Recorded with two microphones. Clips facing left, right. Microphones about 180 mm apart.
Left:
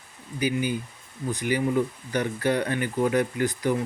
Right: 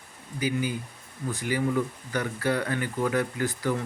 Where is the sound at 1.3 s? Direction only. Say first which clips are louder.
Left 2 dB; 20° left (ahead or behind).